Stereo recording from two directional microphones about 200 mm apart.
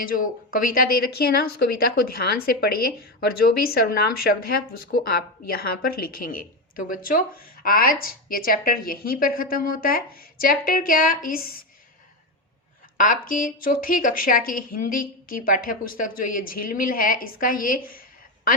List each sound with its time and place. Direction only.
0.0 s a woman's voice: 45° left (ahead or behind)
13.0 s a woman's voice: 40° left (ahead or behind)